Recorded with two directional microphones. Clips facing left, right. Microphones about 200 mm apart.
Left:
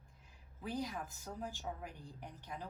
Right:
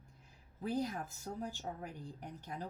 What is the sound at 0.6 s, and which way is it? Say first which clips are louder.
Speech: right 4 dB; 40° right (ahead or behind).